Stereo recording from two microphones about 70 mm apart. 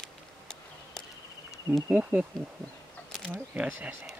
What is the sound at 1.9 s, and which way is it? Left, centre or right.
Speech, right.